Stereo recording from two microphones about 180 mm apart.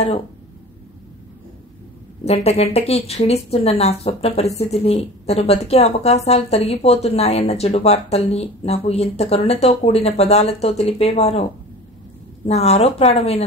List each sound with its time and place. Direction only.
2.2 s a woman's voice: 35° left (ahead or behind)
12.4 s a woman's voice: 35° left (ahead or behind)